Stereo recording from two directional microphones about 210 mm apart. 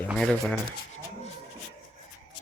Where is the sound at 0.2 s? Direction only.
5° left (ahead or behind).